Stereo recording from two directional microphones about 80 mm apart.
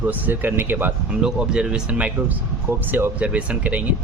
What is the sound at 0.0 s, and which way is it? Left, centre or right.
Speech, right.